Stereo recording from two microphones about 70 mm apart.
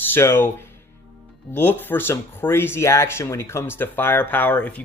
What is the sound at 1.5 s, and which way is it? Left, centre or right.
Speech, left.